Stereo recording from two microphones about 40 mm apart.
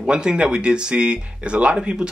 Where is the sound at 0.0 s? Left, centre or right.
Centre.